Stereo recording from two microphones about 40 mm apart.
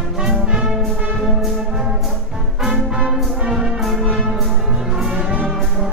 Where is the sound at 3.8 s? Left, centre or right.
Centre.